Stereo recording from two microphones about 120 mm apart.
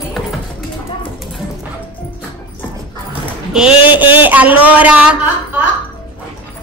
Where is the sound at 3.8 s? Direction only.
15° right (ahead or behind).